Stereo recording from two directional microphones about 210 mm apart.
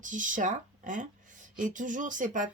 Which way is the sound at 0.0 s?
40° right (ahead or behind).